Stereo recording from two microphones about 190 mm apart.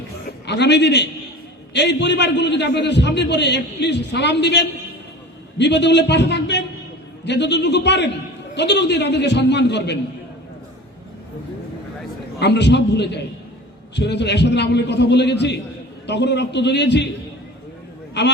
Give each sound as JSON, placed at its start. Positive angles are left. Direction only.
{"t": 0.3, "sound": "a man's voice", "side_deg": 60}
{"t": 12.4, "sound": "a man's voice", "side_deg": 65}